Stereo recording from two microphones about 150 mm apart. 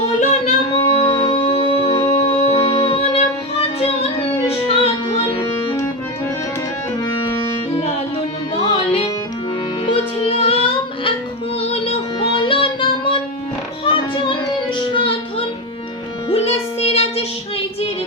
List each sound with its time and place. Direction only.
0.2 s singing: 50° left (ahead or behind)
0.9 s music: 40° left (ahead or behind)
7.0 s music: 30° left (ahead or behind)
8.7 s music: 40° left (ahead or behind)
13.8 s child singing: 35° left (ahead or behind)
14.8 s music: 35° left (ahead or behind)